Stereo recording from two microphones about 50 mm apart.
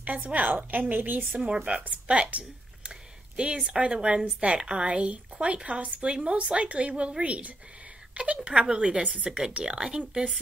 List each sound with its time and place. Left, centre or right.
0.3 s a woman's voice: right
1.3 s a woman's voice: right